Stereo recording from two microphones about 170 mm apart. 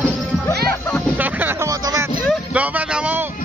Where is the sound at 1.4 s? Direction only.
15° right (ahead or behind).